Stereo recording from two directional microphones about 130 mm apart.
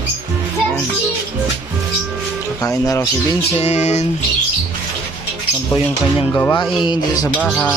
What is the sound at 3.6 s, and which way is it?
Music, 60° left (ahead or behind).